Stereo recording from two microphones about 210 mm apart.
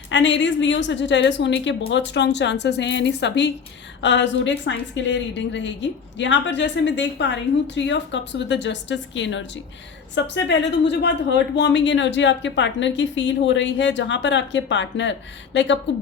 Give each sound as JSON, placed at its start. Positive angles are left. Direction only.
{"t": 0.1, "sound": "a woman's voice", "side_deg": 60}